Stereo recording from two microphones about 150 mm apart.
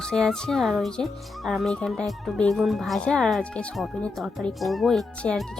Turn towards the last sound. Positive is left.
turn(degrees=5)  # may be behind; listen again after turning